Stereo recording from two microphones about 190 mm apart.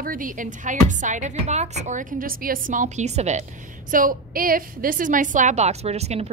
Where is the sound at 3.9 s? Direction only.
45° right (ahead or behind).